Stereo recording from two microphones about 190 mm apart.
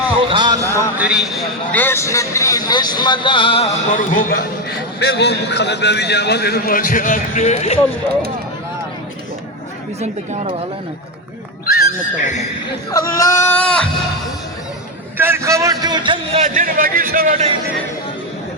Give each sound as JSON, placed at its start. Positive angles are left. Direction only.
{"t": 0.3, "sound": "a sound", "side_deg": -25}
{"t": 0.9, "sound": "a man's voice", "side_deg": -5}
{"t": 1.7, "sound": "a man's voice", "side_deg": 10}
{"t": 3.9, "sound": "a man's voice", "side_deg": 45}
{"t": 4.9, "sound": "a man's voice", "side_deg": 60}
{"t": 11.6, "sound": "speech", "side_deg": 55}
{"t": 12.9, "sound": "speech", "side_deg": 15}
{"t": 15.2, "sound": "a man's voice", "side_deg": -15}
{"t": 16.4, "sound": "a man's voice", "side_deg": -45}